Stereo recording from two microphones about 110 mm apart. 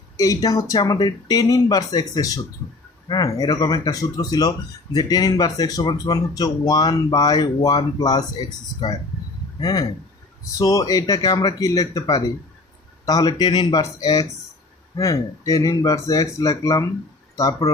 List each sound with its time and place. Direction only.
0.2 s speech: 30° left (ahead or behind)